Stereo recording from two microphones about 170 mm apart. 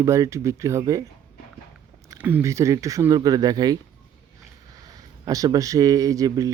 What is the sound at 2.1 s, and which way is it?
Speech, 10° right (ahead or behind).